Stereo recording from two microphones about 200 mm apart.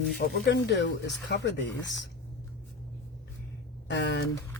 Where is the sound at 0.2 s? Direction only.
55° left (ahead or behind).